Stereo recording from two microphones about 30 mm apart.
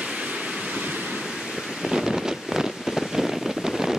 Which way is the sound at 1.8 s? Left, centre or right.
Centre.